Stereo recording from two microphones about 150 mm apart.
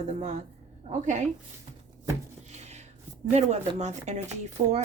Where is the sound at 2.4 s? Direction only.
50° right (ahead or behind).